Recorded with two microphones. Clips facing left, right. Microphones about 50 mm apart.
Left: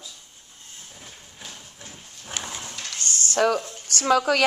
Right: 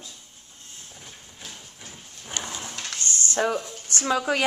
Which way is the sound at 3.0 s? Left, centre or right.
Right.